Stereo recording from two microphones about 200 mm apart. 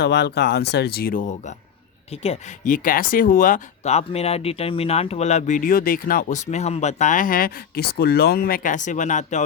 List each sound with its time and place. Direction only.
0.0 s speech: 55° left (ahead or behind); by 9.4 s 40° left (ahead or behind)